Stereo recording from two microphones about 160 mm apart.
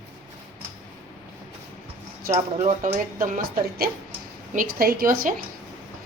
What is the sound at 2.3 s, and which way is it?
Speech, 40° right (ahead or behind).